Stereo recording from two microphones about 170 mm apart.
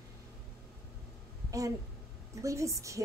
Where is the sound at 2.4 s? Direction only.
20° right (ahead or behind).